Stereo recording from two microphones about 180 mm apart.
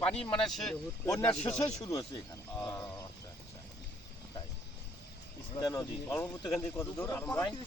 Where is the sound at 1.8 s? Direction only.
20° left (ahead or behind).